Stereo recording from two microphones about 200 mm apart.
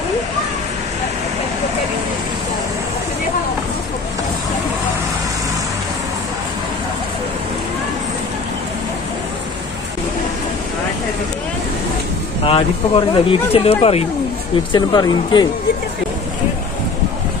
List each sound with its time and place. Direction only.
12.4 s speech: 25° left (ahead or behind)